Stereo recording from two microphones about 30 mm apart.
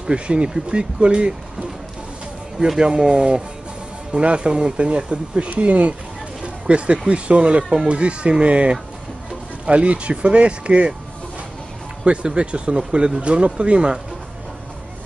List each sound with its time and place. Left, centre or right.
0.0 s speech: right
2.8 s speech: right
5.5 s speech: right
6.4 s speech: right
12.0 s speech: right